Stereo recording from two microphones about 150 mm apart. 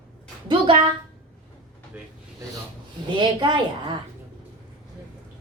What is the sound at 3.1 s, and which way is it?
Speech, 30° right (ahead or behind).